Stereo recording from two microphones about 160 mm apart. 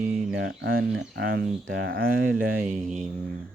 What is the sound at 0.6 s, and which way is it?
Speech, 80° right.